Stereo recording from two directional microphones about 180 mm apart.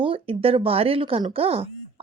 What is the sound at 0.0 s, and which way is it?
A woman's voice, 30° right (ahead or behind).